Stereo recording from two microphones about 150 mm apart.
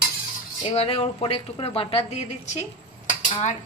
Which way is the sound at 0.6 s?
40° left (ahead or behind).